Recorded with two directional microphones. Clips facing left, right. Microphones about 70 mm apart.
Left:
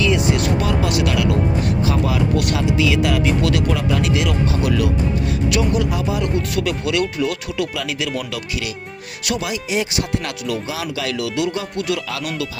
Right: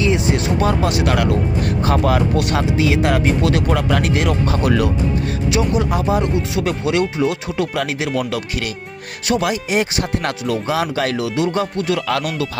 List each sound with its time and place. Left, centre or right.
0.0 s speech: right
2.7 s speech: right
3.7 s speech: right
4.0 s speech: right
5.5 s speech: right
5.9 s speech: right
6.2 s speech: right